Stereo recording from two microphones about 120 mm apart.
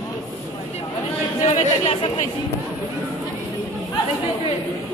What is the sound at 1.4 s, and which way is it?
Chatter, 75° left (ahead or behind).